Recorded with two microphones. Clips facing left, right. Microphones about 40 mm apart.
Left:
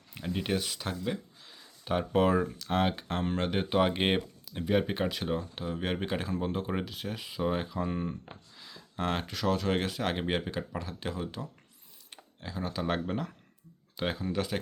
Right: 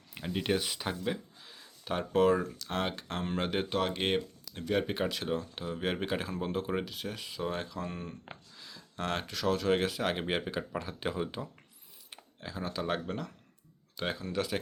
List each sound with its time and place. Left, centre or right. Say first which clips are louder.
0.1 s speech: even; centre
3.7 s speech: left 7 dB; centre
4.7 s speech: left 2 dB; centre
12.1 s speech: left 2 dB; centre